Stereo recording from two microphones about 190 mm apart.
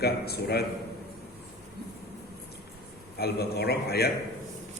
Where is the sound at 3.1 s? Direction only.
55° left (ahead or behind).